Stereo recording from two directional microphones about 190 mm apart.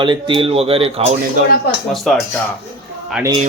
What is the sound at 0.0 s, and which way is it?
Speech, 25° right (ahead or behind).